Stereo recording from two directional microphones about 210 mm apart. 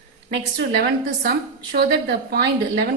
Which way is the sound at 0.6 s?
50° right (ahead or behind).